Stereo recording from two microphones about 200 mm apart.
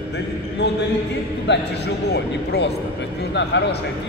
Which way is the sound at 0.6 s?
60° left (ahead or behind).